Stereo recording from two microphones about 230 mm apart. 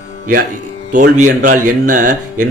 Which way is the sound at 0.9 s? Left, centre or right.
Right.